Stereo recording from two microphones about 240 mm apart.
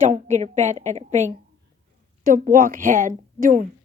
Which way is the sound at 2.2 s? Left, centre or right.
Right.